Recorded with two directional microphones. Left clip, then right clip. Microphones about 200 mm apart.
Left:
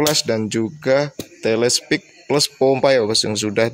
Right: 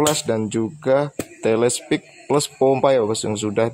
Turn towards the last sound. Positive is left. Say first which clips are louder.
# left 3 dB
turn(degrees=10)  # may be behind; listen again after turning